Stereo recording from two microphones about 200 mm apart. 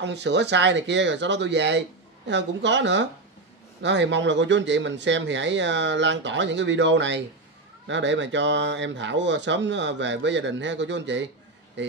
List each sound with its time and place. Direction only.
0.0 s speech: 60° right (ahead or behind)